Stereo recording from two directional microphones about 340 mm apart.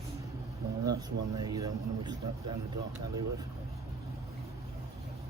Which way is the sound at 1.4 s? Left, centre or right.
Centre.